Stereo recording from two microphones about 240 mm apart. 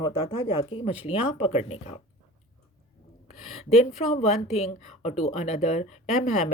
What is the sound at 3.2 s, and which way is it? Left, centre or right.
A woman's voice, left.